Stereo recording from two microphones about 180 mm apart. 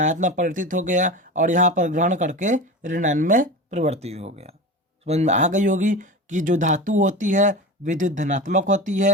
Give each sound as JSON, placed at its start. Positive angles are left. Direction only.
{"t": 0.0, "sound": "speech", "side_deg": -45}